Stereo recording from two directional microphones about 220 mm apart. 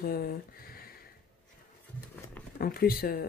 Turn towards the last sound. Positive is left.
turn(degrees=45)  # may be behind; listen again after turning